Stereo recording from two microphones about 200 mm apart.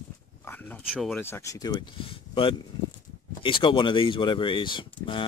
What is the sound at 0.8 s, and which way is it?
Speech, centre (ahead or behind).